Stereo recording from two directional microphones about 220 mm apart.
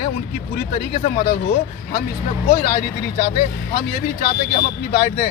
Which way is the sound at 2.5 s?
45° left (ahead or behind).